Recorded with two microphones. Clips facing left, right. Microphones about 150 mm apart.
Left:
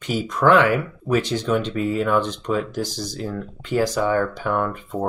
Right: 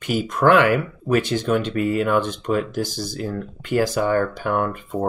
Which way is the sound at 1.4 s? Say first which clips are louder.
Right 1 dB; 5° right (ahead or behind).